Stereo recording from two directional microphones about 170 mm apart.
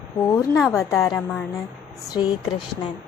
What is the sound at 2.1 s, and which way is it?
Speech, 25° left (ahead or behind).